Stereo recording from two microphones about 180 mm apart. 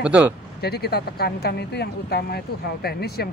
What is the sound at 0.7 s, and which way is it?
Speech, 60° left (ahead or behind).